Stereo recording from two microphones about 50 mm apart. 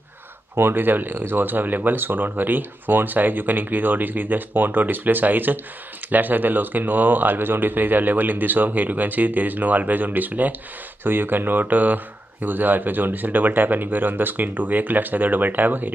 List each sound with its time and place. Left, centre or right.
0.6 s speech: right